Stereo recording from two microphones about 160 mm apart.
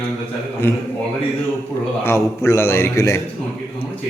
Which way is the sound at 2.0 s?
15° left (ahead or behind).